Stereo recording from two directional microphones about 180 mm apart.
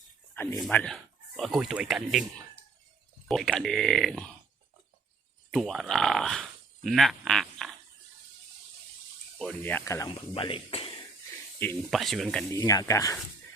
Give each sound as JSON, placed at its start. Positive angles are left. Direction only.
{"t": 0.6, "sound": "speech", "side_deg": 5}
{"t": 3.2, "sound": "speech", "side_deg": 0}
{"t": 5.5, "sound": "speech", "side_deg": 0}
{"t": 9.4, "sound": "speech", "side_deg": 10}
{"t": 10.3, "sound": "speech", "side_deg": 30}
{"t": 11.9, "sound": "speech", "side_deg": 0}
{"t": 12.5, "sound": "speech", "side_deg": 20}